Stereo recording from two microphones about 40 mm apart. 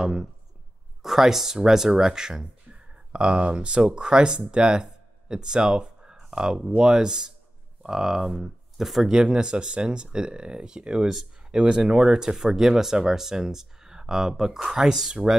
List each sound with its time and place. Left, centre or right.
0.0 s speech: centre
4.8 s a sound: centre
6.8 s speech: centre
9.1 s speech: right